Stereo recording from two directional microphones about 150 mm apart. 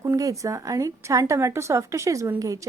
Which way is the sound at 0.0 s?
20° right (ahead or behind).